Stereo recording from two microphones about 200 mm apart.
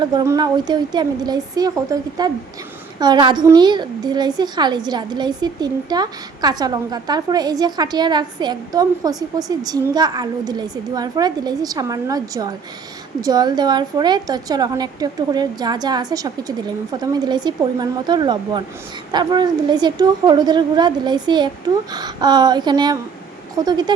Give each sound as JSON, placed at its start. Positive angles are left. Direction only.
{"t": 0.0, "sound": "a woman's voice", "side_deg": -20}